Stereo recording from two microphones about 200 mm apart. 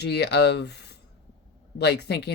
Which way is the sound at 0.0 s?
55° left (ahead or behind).